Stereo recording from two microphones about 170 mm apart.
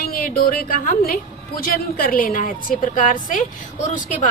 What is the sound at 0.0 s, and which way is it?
A woman's voice, 55° left (ahead or behind).